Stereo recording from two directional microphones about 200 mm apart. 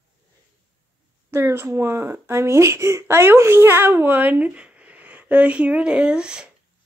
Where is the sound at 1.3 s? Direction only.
10° right (ahead or behind).